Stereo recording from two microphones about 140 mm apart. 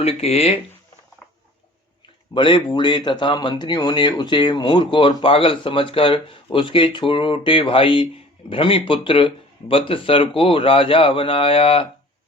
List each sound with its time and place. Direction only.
0.0 s speech: 45° left (ahead or behind)
2.3 s speech: 35° left (ahead or behind)